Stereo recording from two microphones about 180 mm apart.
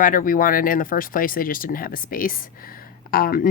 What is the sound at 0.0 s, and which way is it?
A woman's voice, 50° left (ahead or behind).